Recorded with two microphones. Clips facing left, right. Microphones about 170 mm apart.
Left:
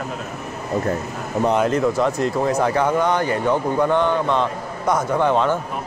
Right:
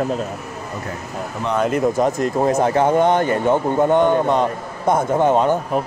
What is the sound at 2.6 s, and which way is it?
Speech, 25° right (ahead or behind).